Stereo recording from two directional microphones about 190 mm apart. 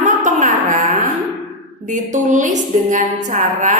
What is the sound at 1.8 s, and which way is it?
A woman's voice, 40° right (ahead or behind).